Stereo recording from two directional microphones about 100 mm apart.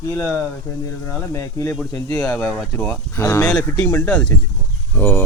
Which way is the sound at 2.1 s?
15° left (ahead or behind).